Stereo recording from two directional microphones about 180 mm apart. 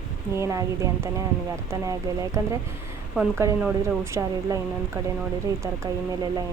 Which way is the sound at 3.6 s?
10° right (ahead or behind).